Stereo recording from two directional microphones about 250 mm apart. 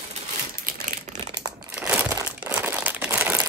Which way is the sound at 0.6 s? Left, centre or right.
Right.